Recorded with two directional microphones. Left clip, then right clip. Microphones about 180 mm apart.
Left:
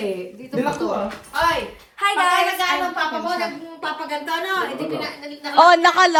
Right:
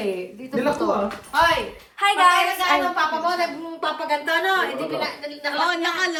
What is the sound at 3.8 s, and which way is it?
A woman's voice, 5° right (ahead or behind).